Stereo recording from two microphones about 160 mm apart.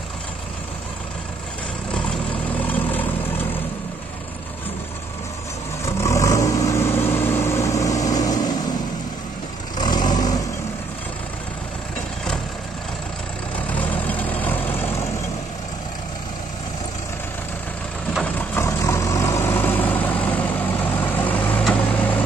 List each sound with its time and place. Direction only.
2.6 s vehicle: 10° left (ahead or behind)
5.9 s vehicle: 20° left (ahead or behind)
9.8 s vehicle: 25° left (ahead or behind)
13.7 s vehicle: 10° left (ahead or behind)
18.1 s vehicle: 10° left (ahead or behind)